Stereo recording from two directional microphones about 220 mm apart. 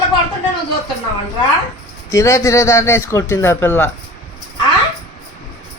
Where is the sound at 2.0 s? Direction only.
15° left (ahead or behind).